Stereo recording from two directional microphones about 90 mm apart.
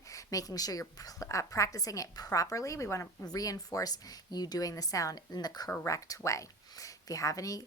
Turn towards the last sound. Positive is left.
turn(degrees=40)  # may be behind; listen again after turning